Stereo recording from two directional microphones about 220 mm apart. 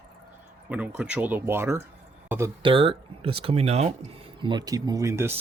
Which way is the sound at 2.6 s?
25° right (ahead or behind).